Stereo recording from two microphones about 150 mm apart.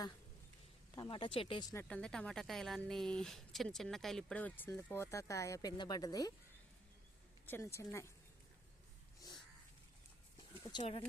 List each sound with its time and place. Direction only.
0.9 s speech: 35° left (ahead or behind)
1.9 s a woman's voice: 5° left (ahead or behind); by 6.3 s 25° left (ahead or behind)
7.4 s speech: 15° left (ahead or behind)
10.7 s speech: 35° left (ahead or behind)